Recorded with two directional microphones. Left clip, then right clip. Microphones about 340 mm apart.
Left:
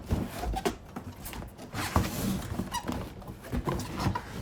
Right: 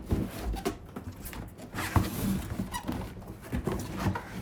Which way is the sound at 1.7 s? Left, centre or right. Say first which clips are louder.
Left 1 dB; centre.